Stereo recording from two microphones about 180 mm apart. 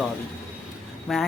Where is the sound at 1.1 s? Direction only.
Centre (ahead or behind).